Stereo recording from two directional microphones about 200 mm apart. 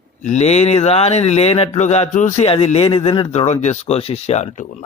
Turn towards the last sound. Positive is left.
turn(degrees=35)  # may be behind; listen again after turning